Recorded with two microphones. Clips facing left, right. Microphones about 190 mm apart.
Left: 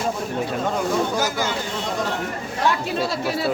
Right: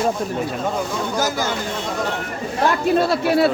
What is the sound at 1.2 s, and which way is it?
Speech, 40° right (ahead or behind).